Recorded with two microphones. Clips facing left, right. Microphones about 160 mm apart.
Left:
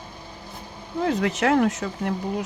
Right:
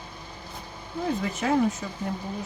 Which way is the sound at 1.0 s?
75° left (ahead or behind).